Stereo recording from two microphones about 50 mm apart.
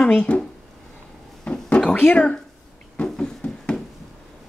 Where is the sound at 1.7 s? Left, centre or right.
Centre.